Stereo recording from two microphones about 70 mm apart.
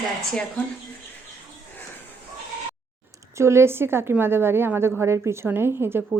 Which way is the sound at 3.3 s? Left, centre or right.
Right.